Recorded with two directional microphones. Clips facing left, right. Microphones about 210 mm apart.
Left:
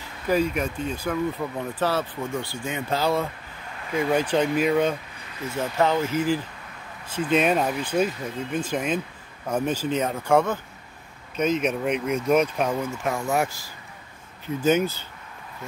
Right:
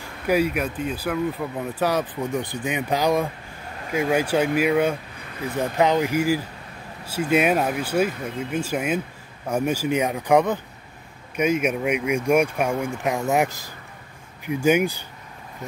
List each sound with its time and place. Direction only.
0.3 s speech: 10° right (ahead or behind)